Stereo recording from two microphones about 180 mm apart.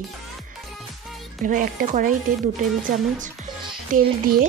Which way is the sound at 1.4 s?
45° right (ahead or behind).